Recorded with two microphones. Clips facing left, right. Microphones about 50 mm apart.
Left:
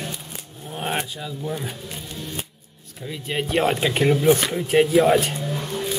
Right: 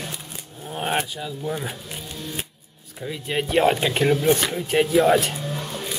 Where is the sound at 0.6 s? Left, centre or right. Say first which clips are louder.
Right 2 dB; centre.